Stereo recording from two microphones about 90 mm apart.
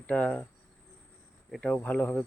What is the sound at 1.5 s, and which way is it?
Speech, 10° left (ahead or behind).